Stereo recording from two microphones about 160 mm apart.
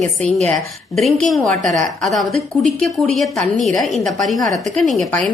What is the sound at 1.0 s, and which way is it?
A woman's voice, 5° left (ahead or behind).